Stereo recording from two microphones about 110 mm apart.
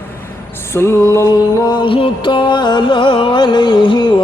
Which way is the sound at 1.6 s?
45° left (ahead or behind).